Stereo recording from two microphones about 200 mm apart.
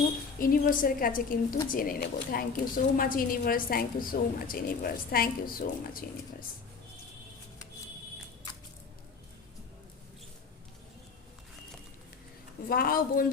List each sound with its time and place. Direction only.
0.3 s a woman's voice: 45° left (ahead or behind)
12.6 s a woman's voice: 45° left (ahead or behind)